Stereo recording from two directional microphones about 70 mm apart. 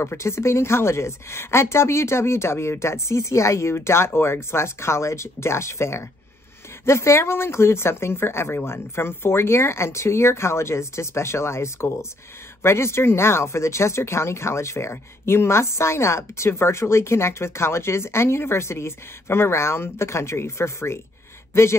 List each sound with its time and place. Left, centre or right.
0.0 s speech: left